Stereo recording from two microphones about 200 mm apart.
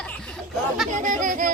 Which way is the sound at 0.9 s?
40° right (ahead or behind).